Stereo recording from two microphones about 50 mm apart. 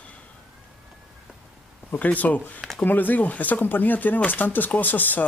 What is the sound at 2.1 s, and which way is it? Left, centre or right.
Speech, left.